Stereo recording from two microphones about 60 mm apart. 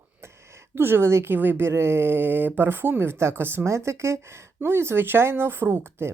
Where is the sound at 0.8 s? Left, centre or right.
Right.